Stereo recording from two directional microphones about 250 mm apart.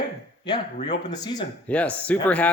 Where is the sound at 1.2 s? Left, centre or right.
Centre.